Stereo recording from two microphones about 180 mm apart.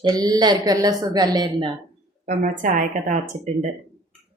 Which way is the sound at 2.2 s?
45° right (ahead or behind).